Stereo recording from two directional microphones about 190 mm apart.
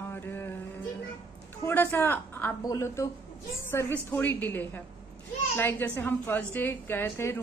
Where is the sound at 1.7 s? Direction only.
10° left (ahead or behind).